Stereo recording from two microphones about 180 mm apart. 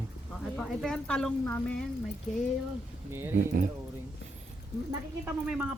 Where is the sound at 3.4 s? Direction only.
45° right (ahead or behind).